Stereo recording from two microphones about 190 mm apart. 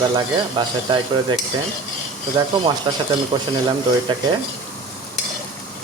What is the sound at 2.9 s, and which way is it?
Speech, 25° right (ahead or behind).